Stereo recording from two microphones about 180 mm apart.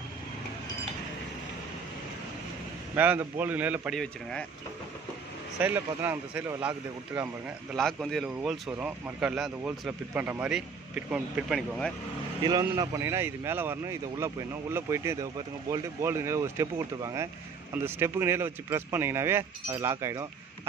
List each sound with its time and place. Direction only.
3.0 s speech: 10° right (ahead or behind)
3.9 s speech: 5° left (ahead or behind)
5.6 s speech: 10° right (ahead or behind)
12.4 s speech: 20° right (ahead or behind)